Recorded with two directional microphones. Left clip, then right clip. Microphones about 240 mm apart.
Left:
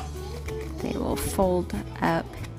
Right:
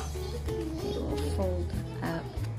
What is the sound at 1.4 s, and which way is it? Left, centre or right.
Speech, left.